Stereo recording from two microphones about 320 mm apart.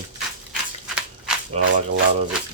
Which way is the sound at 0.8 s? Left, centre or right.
Centre.